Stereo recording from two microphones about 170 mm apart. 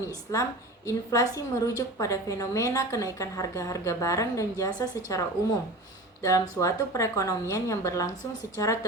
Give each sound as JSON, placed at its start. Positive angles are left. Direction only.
{"t": 0.3, "sound": "a woman's voice", "side_deg": 20}
{"t": 6.2, "sound": "a woman's voice", "side_deg": 20}